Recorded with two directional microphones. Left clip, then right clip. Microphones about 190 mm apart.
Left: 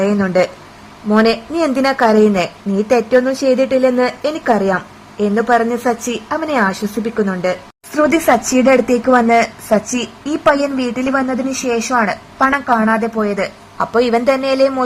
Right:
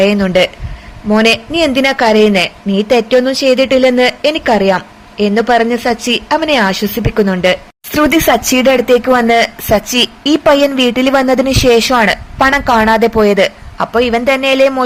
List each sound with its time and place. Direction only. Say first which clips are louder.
0.0 s a woman's voice: right 4 dB; 10° right (ahead or behind); by 13.5 s 25° right (ahead or behind)
13.7 s a woman's voice: right 1 dB; 10° right (ahead or behind)